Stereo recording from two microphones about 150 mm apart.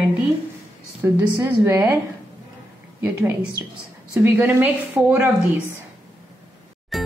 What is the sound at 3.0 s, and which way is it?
Speech, 10° right (ahead or behind).